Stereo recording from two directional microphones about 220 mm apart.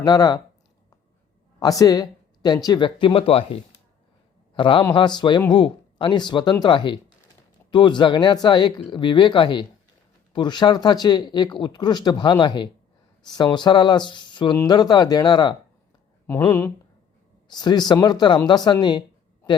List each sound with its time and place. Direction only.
0.0 s speech: 15° left (ahead or behind)
1.5 s speech: 15° left (ahead or behind)